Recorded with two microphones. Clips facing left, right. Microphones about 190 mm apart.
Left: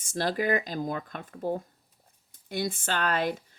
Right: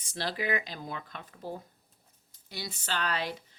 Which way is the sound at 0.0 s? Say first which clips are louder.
Left 6 dB; 45° left (ahead or behind).